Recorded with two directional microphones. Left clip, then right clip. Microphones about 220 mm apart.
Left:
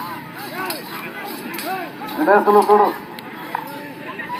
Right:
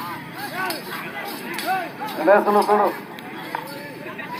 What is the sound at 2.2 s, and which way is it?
Speech, 45° right (ahead or behind).